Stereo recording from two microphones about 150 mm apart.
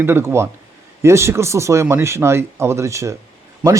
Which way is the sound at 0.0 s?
15° right (ahead or behind).